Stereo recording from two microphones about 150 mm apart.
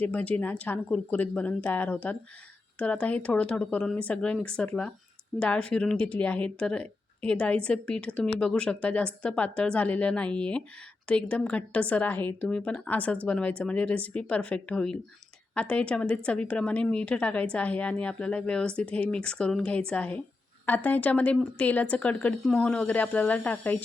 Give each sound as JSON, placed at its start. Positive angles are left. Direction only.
{"t": 0.0, "sound": "speech", "side_deg": 10}